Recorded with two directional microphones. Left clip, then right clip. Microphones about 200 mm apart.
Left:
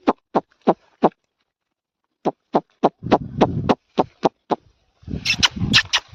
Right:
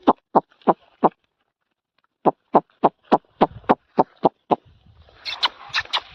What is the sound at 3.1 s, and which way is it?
Heart sounds, 30° left (ahead or behind).